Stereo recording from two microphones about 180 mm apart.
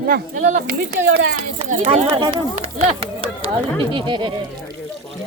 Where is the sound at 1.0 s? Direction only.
70° right (ahead or behind).